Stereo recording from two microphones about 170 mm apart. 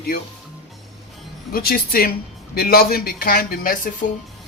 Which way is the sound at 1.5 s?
60° left (ahead or behind).